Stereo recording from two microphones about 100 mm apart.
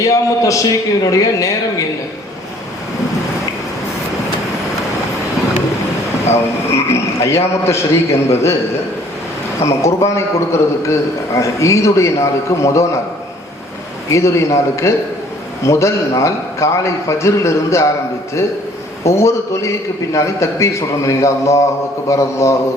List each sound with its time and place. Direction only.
0.0 s a man's voice: 35° left (ahead or behind)
6.3 s a man's voice: 25° left (ahead or behind)
9.6 s a man's voice: 30° left (ahead or behind)
14.1 s a man's voice: 30° left (ahead or behind)
19.0 s a man's voice: 30° left (ahead or behind)